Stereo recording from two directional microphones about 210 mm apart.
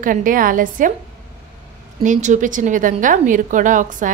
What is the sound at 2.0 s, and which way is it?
A woman's voice, 35° right (ahead or behind).